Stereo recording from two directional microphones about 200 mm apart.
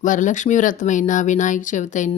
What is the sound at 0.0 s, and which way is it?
Speech, 40° left (ahead or behind).